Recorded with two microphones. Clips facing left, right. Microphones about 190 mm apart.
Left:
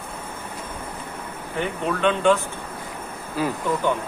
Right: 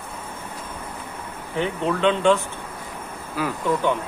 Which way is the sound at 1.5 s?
5° left (ahead or behind).